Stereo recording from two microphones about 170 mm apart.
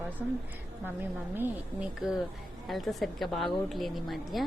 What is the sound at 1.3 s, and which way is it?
Speech, 10° right (ahead or behind).